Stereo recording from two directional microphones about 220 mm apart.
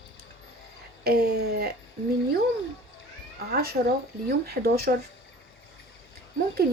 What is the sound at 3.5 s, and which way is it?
Speech, 45° right (ahead or behind).